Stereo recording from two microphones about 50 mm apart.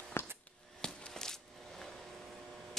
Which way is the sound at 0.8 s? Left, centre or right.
Centre.